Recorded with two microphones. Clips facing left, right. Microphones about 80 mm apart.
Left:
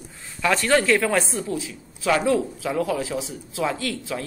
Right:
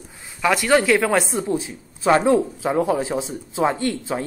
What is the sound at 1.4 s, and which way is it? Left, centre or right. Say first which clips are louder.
A woman's voice: right 5 dB; right.